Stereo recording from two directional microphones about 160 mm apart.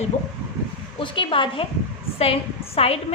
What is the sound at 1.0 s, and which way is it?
Speech, 35° left (ahead or behind).